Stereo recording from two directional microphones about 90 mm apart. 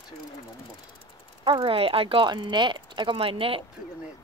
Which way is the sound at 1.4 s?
70° right (ahead or behind).